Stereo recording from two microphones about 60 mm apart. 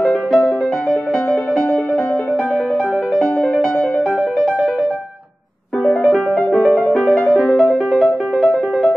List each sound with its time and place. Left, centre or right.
0.3 s music: centre
5.9 s music: centre